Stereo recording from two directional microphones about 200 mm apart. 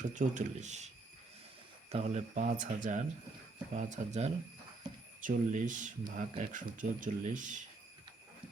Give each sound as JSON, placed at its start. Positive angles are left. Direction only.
{"t": 0.0, "sound": "speech", "side_deg": -40}
{"t": 1.9, "sound": "speech", "side_deg": -35}